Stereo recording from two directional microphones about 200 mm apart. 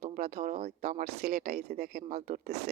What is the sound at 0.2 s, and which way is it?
Speech, 45° right (ahead or behind).